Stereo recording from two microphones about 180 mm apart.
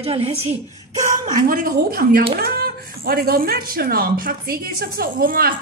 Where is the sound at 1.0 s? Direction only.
55° right (ahead or behind).